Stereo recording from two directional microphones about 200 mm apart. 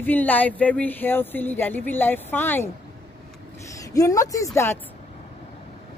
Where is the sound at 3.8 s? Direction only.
15° left (ahead or behind).